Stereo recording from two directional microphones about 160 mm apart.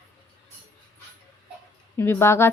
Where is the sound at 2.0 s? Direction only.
15° left (ahead or behind).